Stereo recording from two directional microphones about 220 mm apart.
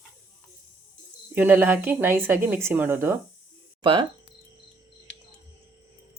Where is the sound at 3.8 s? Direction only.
20° right (ahead or behind).